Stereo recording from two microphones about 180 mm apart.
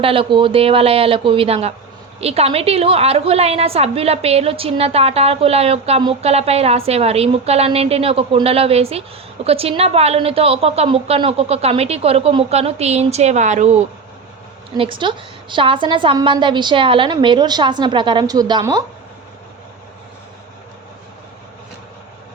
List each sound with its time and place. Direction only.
0.0 s a woman's voice: 30° right (ahead or behind)
14.8 s a woman's voice: 25° right (ahead or behind)